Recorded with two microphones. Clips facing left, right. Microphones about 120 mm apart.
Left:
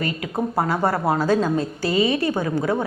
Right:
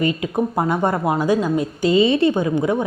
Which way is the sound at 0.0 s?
20° right (ahead or behind).